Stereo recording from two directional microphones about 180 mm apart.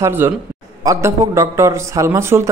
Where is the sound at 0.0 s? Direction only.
10° right (ahead or behind).